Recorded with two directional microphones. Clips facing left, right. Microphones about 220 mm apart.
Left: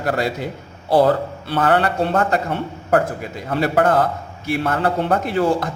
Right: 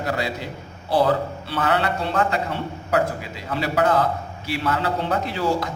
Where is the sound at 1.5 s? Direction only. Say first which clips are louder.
Left 5 dB; 50° left (ahead or behind).